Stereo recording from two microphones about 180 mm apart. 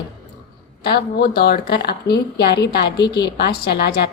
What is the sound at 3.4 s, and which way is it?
Speech, 65° left (ahead or behind).